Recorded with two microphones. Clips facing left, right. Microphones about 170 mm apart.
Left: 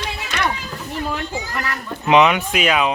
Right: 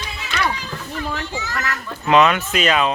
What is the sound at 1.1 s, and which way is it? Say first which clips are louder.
A child's voice: left 1 dB; 15° left (ahead or behind).